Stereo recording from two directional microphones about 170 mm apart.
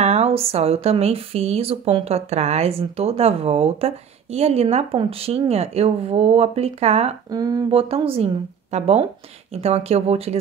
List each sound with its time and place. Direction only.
0.0 s speech: 40° right (ahead or behind)
7.2 s speech: 20° right (ahead or behind)
7.9 s speech: 35° right (ahead or behind)